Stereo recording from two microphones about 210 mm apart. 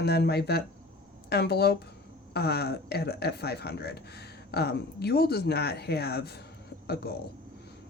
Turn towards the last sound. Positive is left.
turn(degrees=50)  # may be behind; listen again after turning